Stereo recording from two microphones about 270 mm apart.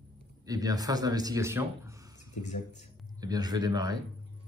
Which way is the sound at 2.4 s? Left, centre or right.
Left.